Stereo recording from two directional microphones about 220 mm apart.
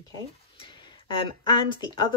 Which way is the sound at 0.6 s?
20° left (ahead or behind).